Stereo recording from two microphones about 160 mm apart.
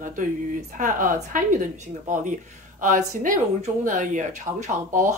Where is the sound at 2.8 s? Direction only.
55° right (ahead or behind).